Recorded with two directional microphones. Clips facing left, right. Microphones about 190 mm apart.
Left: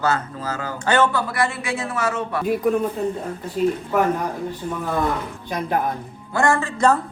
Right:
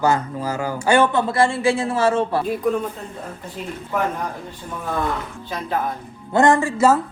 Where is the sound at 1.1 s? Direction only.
25° right (ahead or behind).